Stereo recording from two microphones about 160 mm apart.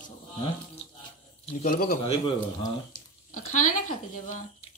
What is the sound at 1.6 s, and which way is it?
Speech, 55° left (ahead or behind).